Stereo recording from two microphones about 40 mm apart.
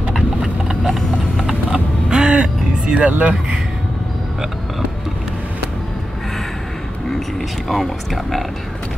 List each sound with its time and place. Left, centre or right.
0.4 s clip-clop: centre
2.0 s vehicle: right
2.3 s music: right
7.6 s speech: centre